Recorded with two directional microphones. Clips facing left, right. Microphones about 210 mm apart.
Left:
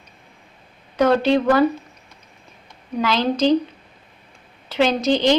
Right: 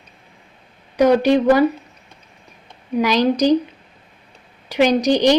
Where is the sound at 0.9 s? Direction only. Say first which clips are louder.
Right 3 dB; 15° right (ahead or behind).